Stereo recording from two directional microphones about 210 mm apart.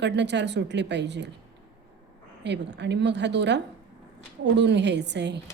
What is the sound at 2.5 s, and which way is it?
A woman's voice, 55° right (ahead or behind).